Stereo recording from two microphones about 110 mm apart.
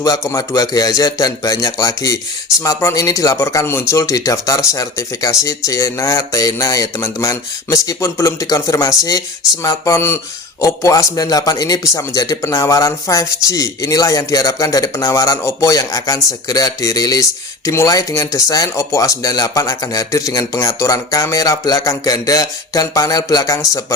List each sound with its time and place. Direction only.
0.0 s speech: 30° left (ahead or behind)